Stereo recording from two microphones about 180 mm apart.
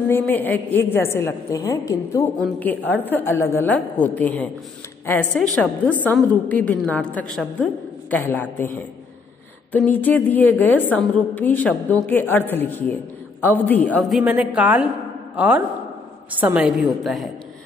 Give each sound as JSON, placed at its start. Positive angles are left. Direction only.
{"t": 0.1, "sound": "a woman's voice", "side_deg": 10}